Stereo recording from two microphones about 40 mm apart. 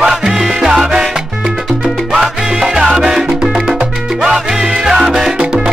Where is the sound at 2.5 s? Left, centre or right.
Centre.